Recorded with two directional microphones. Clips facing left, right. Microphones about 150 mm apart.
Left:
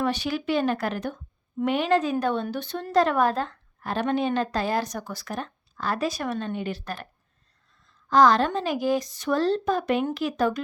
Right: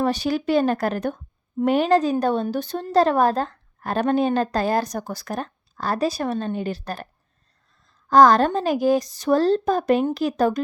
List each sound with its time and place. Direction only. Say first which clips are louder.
0.0 s a woman's voice: right 4 dB; 40° right (ahead or behind)
1.5 s a woman's voice: right 5 dB; 40° right (ahead or behind)